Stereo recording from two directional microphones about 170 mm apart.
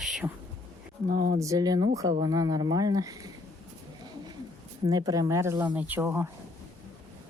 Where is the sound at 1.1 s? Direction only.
60° right (ahead or behind).